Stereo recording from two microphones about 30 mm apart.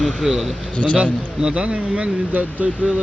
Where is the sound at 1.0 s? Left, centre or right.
Right.